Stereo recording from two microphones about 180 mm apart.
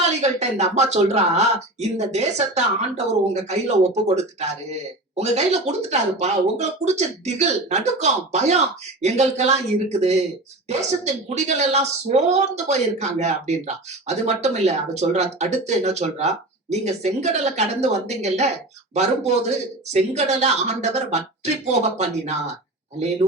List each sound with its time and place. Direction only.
0.0 s speech: 40° right (ahead or behind)